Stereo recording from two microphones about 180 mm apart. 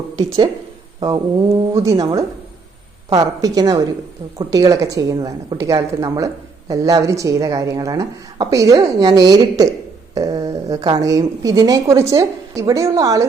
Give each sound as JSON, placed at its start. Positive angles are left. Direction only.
{"t": 0.9, "sound": "mantra", "side_deg": -20}
{"t": 1.7, "sound": "a woman's voice", "side_deg": -20}